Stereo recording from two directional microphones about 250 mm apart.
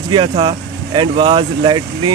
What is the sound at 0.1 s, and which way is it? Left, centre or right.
Speech, right.